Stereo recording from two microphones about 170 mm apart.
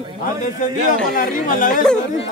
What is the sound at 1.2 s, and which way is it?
Speech, 50° left (ahead or behind).